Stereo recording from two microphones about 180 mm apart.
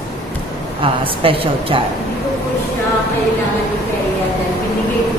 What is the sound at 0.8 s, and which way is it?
Speech, 30° right (ahead or behind).